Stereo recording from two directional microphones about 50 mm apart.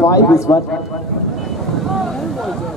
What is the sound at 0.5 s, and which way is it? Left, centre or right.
Speech, left.